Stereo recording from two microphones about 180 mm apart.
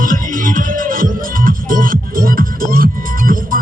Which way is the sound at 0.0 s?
50° right (ahead or behind).